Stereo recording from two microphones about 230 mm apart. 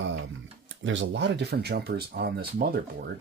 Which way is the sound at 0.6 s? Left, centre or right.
Right.